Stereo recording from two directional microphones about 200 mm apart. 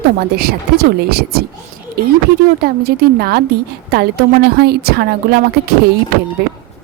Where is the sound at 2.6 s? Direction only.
50° right (ahead or behind).